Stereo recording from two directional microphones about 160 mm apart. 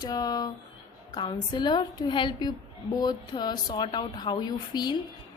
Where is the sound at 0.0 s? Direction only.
25° left (ahead or behind).